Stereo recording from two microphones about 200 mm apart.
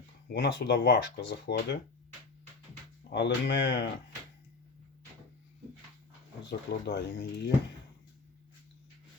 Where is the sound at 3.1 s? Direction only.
60° left (ahead or behind).